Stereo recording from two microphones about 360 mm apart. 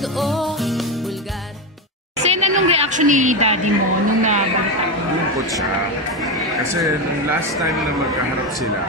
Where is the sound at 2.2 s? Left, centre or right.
Centre.